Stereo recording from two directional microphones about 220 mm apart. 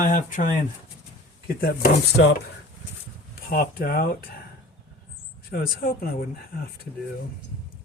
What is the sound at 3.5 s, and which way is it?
Speech, 40° left (ahead or behind).